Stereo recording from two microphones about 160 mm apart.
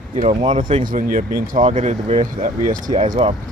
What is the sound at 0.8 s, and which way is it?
Speech, 60° right (ahead or behind).